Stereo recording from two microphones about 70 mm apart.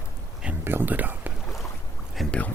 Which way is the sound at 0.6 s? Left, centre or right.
Right.